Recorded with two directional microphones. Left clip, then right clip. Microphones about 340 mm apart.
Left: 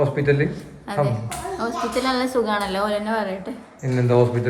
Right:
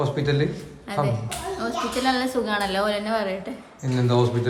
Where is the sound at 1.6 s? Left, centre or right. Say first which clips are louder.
Left 1 dB; centre.